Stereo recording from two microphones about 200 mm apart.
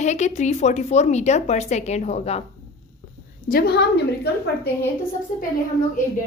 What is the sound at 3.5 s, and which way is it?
Speech, 50° left (ahead or behind).